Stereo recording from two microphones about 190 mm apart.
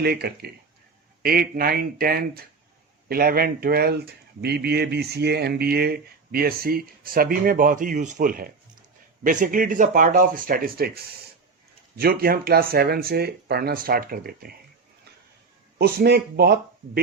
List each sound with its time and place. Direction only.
0.0 s speech: 55° right (ahead or behind)
15.8 s speech: 55° right (ahead or behind)